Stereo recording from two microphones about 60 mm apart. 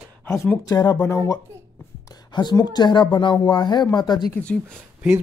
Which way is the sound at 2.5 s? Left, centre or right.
Left.